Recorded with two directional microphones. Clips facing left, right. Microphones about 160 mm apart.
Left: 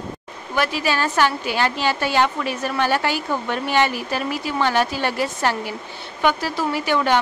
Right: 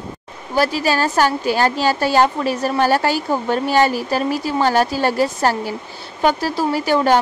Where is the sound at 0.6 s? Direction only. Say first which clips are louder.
Right 4 dB; 40° right (ahead or behind).